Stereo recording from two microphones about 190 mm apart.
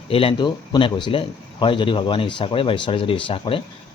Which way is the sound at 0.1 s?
30° left (ahead or behind).